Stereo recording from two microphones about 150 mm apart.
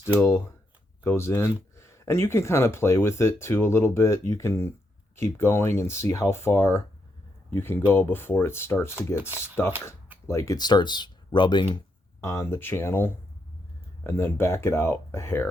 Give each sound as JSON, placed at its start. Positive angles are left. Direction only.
{"t": 0.2, "sound": "speech", "side_deg": 15}
{"t": 12.2, "sound": "speech", "side_deg": 20}